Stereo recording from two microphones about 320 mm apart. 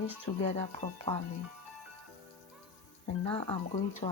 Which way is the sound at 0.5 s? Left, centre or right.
Centre.